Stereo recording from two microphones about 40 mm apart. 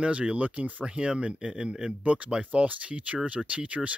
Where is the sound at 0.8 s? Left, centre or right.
Right.